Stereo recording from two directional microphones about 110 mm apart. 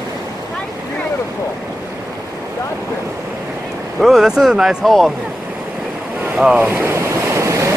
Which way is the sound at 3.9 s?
Centre (ahead or behind).